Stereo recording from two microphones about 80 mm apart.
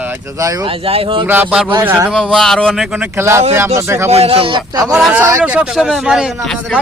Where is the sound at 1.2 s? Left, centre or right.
Right.